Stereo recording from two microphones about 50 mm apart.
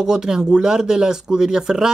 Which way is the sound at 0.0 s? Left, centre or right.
Centre.